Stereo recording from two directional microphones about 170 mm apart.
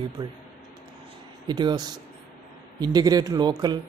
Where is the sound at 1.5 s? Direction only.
25° right (ahead or behind).